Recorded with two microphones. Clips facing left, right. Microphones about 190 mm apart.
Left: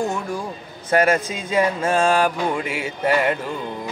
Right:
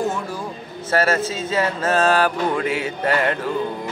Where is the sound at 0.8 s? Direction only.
15° left (ahead or behind).